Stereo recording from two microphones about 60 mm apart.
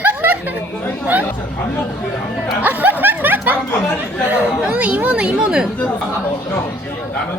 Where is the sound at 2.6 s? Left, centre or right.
Right.